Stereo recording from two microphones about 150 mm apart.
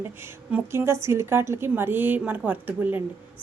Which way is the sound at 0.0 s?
15° right (ahead or behind).